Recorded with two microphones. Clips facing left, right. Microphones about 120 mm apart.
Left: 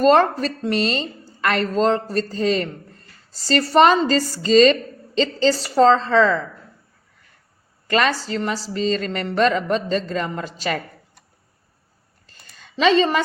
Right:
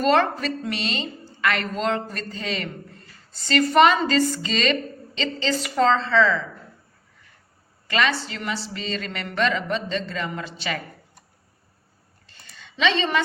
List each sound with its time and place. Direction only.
0.0 s a woman's voice: 40° left (ahead or behind)
7.9 s a woman's voice: 40° left (ahead or behind)
12.2 s a sound: 40° left (ahead or behind)